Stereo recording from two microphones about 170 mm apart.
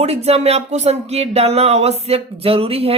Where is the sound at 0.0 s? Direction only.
40° right (ahead or behind).